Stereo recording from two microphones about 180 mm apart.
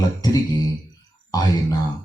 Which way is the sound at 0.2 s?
20° left (ahead or behind).